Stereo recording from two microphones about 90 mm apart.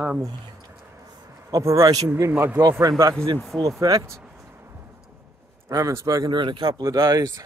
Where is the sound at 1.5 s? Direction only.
35° right (ahead or behind).